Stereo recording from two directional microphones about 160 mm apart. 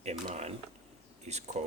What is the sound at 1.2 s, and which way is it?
Speech, 45° right (ahead or behind).